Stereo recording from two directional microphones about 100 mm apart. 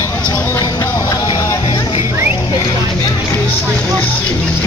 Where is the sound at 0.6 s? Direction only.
35° left (ahead or behind).